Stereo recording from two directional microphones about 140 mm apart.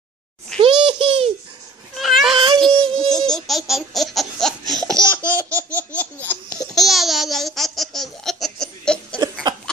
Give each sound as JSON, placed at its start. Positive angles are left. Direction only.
{"t": 0.6, "sound": "a sound", "side_deg": -40}
{"t": 2.0, "sound": "baby cry", "side_deg": 0}
{"t": 2.3, "sound": "child singing", "side_deg": -30}
{"t": 2.7, "sound": "music", "side_deg": -35}
{"t": 3.1, "sound": "laughter", "side_deg": 5}
{"t": 6.7, "sound": "laughter", "side_deg": 0}
{"t": 9.2, "sound": "a sound", "side_deg": -30}